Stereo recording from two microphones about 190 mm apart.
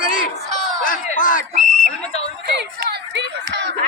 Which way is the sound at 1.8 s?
35° left (ahead or behind).